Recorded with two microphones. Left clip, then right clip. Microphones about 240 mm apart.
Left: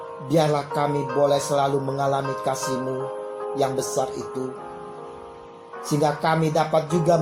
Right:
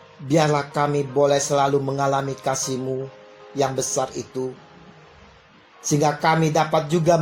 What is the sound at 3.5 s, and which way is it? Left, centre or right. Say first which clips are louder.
Speech: right 2 dB; right.